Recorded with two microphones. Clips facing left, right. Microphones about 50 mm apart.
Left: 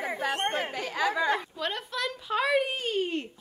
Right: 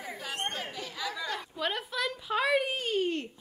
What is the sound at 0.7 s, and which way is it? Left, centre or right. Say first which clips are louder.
Speech: left 8 dB; left.